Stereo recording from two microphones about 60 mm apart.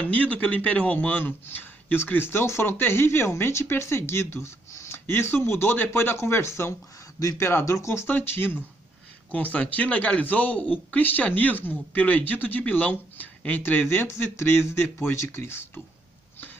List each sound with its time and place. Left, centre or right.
0.1 s a man's voice: left
7.2 s speech: left
7.4 s speech: left
8.1 s a man's voice: left
9.3 s speech: left
13.6 s speech: left